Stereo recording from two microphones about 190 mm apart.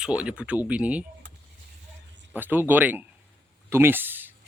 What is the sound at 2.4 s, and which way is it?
Speech, 10° right (ahead or behind).